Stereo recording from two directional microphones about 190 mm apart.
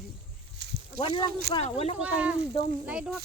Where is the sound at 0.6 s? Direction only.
60° right (ahead or behind).